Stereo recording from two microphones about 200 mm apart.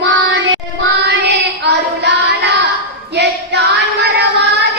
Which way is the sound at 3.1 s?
60° right (ahead or behind).